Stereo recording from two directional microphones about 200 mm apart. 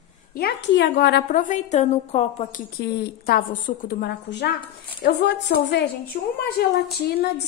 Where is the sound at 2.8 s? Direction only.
50° left (ahead or behind).